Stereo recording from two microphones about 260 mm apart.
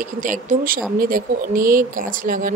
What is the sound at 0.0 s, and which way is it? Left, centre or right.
A woman's voice, right.